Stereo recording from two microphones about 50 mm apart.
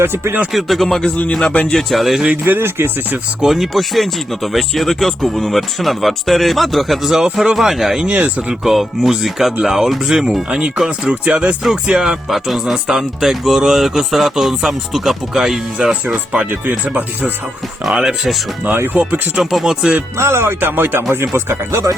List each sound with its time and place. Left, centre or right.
0.0 s speech: right
0.5 s speech: centre
1.4 s speech: left
1.7 s speech: centre
2.3 s speech: right
3.4 s speech: centre
8.0 s speech: right
8.6 s speech: centre
12.3 s speech: centre
16.1 s speech: right
16.8 s speech: right
17.9 s speech: centre
19.4 s speech: centre
20.1 s speech: right